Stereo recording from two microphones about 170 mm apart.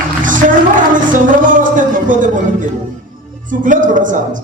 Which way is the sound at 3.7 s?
50° right (ahead or behind).